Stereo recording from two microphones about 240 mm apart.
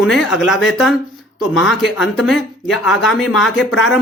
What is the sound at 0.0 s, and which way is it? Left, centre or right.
Speech, centre.